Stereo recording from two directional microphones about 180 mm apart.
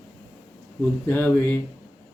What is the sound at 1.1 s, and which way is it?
Speech, 10° left (ahead or behind).